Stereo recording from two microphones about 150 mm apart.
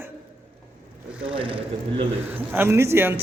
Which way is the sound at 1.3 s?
35° right (ahead or behind).